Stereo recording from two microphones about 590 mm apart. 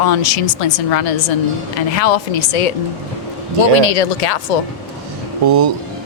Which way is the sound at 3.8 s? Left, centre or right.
Left.